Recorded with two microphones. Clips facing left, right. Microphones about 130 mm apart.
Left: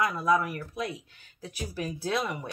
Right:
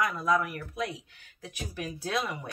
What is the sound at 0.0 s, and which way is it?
Speech, 30° left (ahead or behind).